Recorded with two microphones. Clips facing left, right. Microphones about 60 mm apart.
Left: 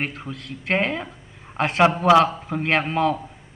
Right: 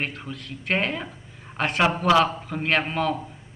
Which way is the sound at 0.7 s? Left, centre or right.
Centre.